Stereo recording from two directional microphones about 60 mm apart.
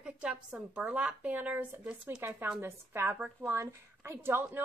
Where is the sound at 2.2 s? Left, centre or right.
Right.